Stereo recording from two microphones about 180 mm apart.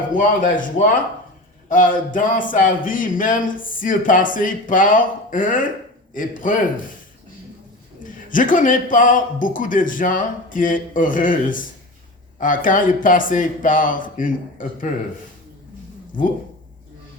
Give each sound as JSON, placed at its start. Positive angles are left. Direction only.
{"t": 0.1, "sound": "a man's voice", "side_deg": 50}
{"t": 8.0, "sound": "a man's voice", "side_deg": 50}
{"t": 16.1, "sound": "a man's voice", "side_deg": 50}